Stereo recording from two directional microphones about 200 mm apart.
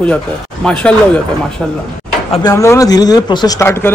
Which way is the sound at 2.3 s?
20° left (ahead or behind).